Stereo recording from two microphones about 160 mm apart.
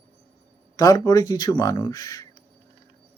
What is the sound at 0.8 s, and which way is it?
Speech, 20° left (ahead or behind).